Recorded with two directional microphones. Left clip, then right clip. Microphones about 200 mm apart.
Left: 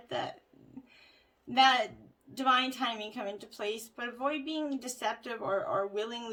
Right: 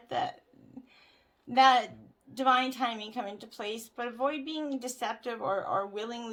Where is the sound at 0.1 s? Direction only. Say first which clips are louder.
Right 4 dB; 30° right (ahead or behind).